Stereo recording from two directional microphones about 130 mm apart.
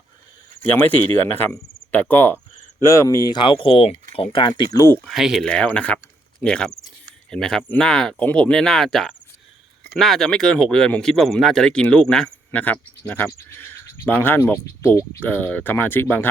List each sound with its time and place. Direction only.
1.4 s cricket: 10° left (ahead or behind)
2.8 s speech: 20° left (ahead or behind); by 4.6 s 40° left (ahead or behind)
4.7 s speech: 25° left (ahead or behind)
5.0 s speech: centre (ahead or behind); by 16.3 s 15° left (ahead or behind)